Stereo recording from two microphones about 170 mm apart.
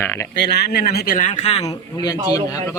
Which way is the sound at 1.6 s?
25° left (ahead or behind).